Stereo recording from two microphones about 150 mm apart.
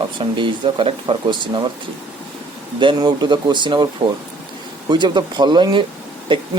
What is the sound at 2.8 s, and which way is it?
Speech, 30° right (ahead or behind).